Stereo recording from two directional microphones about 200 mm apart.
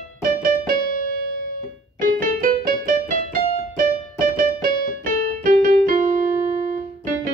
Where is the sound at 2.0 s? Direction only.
45° right (ahead or behind).